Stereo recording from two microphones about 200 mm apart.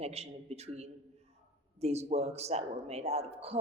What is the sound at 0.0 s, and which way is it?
A woman's voice, 30° right (ahead or behind).